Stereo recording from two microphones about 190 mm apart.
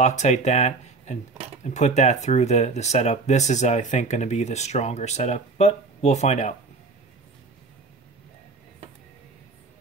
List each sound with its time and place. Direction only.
0.0 s speech: 35° left (ahead or behind)